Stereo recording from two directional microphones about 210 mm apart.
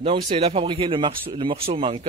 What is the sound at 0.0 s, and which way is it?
Speech, 25° right (ahead or behind).